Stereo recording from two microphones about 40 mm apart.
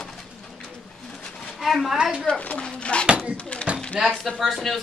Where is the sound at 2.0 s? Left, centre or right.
Right.